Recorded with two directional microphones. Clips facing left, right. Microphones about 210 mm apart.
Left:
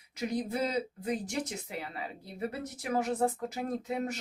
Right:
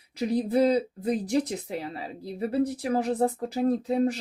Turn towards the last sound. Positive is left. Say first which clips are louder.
# right 9 dB
turn(degrees=-35)  # may be behind; listen again after turning